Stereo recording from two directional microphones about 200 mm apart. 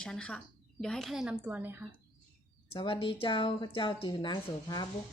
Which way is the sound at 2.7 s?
25° left (ahead or behind).